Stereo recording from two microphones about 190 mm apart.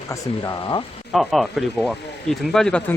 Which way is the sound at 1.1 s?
Centre (ahead or behind).